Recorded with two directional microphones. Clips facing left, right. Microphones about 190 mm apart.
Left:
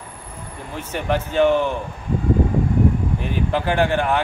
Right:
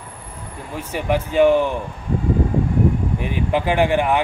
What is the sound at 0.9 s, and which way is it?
Speech, 10° right (ahead or behind).